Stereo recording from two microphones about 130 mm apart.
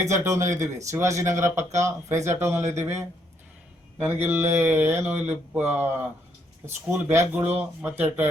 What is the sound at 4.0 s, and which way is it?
Speech, 15° right (ahead or behind).